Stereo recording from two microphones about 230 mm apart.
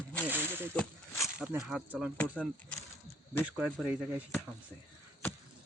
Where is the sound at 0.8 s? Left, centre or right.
Centre.